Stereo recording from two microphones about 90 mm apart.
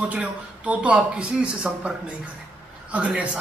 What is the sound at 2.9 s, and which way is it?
Speech, 15° right (ahead or behind).